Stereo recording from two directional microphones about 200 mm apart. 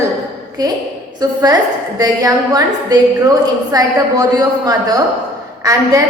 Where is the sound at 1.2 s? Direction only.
20° right (ahead or behind).